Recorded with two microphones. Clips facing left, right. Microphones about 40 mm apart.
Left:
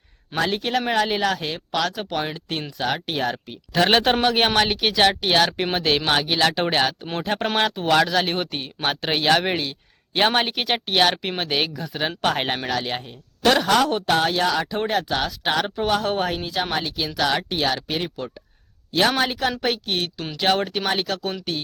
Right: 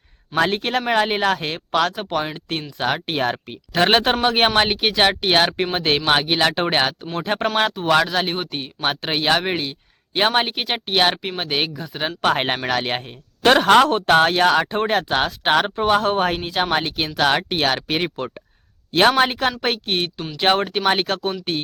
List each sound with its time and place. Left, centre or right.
0.3 s speech: right
2.0 s speech: centre
7.4 s speech: centre
8.6 s speech: centre
9.4 s speech: centre
12.3 s speech: right
12.6 s speech: right
20.8 s speech: right